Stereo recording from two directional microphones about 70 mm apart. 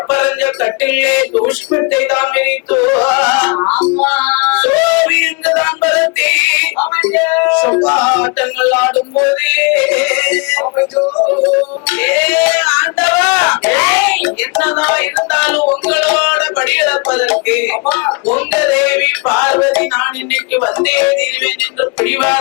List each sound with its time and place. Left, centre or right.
0.1 s music: left